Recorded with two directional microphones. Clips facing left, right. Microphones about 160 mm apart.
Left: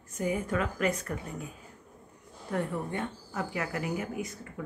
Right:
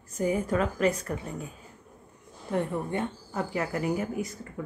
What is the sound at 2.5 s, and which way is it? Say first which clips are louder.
Speech: right 3 dB; 25° right (ahead or behind).